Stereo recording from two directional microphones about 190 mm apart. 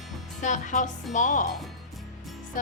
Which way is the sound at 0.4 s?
40° left (ahead or behind).